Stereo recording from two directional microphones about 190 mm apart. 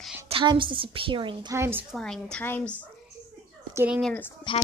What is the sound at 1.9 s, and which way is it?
Speech, 5° left (ahead or behind).